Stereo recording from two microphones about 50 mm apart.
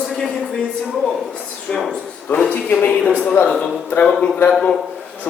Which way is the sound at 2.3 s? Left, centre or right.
Left.